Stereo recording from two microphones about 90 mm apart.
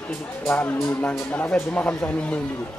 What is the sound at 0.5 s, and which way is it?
Speech, 15° left (ahead or behind).